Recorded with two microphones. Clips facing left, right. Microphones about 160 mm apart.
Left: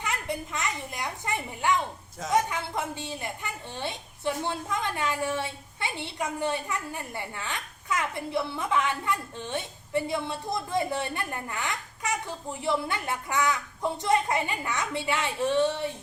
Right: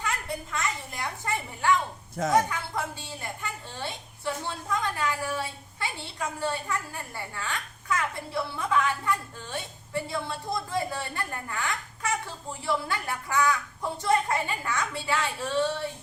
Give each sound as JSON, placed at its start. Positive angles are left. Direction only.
{"t": 0.0, "sound": "a child's voice", "side_deg": 20}